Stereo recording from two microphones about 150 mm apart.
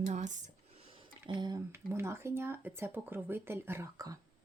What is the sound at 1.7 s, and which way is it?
Speech, 15° right (ahead or behind).